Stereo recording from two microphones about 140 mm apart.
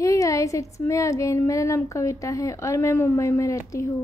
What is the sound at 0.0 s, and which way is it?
Speech, 20° left (ahead or behind).